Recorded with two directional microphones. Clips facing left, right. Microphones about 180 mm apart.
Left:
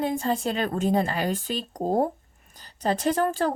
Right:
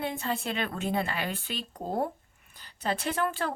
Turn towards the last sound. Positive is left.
turn(degrees=40)  # may be behind; listen again after turning